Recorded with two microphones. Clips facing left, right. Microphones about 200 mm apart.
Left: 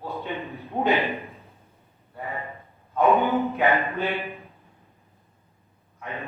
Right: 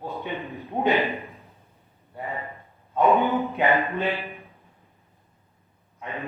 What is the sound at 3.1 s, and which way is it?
Speech, centre (ahead or behind).